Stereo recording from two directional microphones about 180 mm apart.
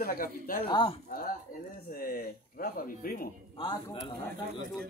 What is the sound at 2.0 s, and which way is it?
Speech, 55° left (ahead or behind).